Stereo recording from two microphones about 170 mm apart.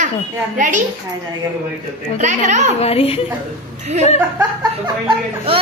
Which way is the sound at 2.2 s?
45° right (ahead or behind).